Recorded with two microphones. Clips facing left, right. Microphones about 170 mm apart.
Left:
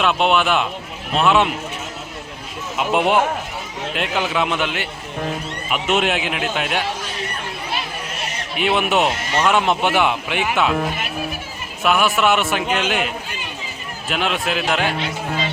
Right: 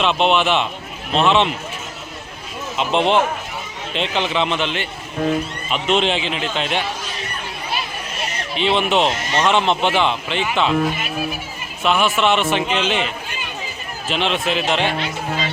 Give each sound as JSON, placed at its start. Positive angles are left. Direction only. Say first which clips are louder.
{"t": 0.0, "sound": "a man's voice", "louder": "even", "side_deg": 5}
{"t": 2.7, "sound": "a man's voice", "louder": "even", "side_deg": 10}
{"t": 8.5, "sound": "speech", "louder": "right 1 dB", "side_deg": 10}
{"t": 11.8, "sound": "a man's voice", "louder": "even", "side_deg": 5}
{"t": 14.1, "sound": "a man's voice", "louder": "right 1 dB", "side_deg": 5}